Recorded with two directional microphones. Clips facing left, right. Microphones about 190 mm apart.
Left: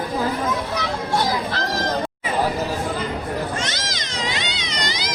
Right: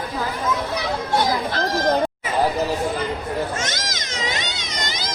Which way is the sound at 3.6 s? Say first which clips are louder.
Even; 45° right (ahead or behind).